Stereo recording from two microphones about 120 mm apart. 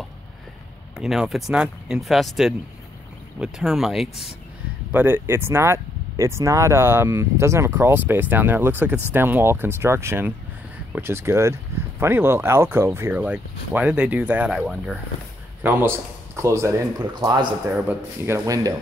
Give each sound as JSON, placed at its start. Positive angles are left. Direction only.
{"t": 0.9, "sound": "speech", "side_deg": -5}
{"t": 4.9, "sound": "speech", "side_deg": -15}
{"t": 13.2, "sound": "speech", "side_deg": -10}
{"t": 15.6, "sound": "speech", "side_deg": -20}
{"t": 17.0, "sound": "speech", "side_deg": -35}
{"t": 17.6, "sound": "speech", "side_deg": -10}
{"t": 18.2, "sound": "speech", "side_deg": -25}